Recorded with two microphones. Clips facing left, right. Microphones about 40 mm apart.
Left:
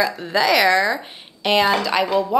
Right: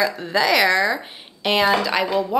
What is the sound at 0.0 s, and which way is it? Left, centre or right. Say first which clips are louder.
Speech: left 1 dB; centre.